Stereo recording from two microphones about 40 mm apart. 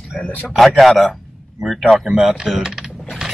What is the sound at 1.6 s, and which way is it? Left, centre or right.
Speech, centre.